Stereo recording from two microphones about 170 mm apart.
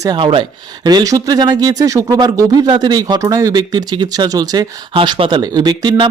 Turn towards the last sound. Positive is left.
turn(degrees=-25)  # may be behind; listen again after turning